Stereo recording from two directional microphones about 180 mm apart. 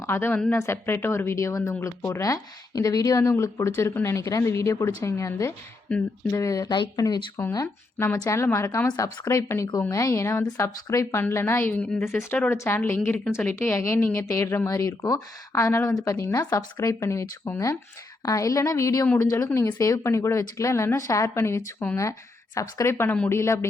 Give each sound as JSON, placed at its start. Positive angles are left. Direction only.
{"t": 0.0, "sound": "a woman's voice", "side_deg": 10}